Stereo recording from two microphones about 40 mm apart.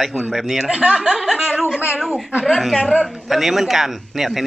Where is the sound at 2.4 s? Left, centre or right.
Centre.